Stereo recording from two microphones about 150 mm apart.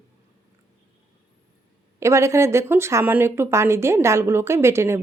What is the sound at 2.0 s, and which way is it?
Speech, 20° right (ahead or behind).